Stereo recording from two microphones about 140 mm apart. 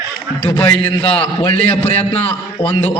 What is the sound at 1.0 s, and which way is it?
Speech, 40° left (ahead or behind).